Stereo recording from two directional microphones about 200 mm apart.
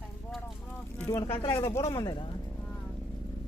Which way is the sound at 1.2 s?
25° left (ahead or behind).